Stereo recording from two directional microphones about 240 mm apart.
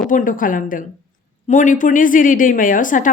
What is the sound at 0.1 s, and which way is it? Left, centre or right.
A woman's voice, left.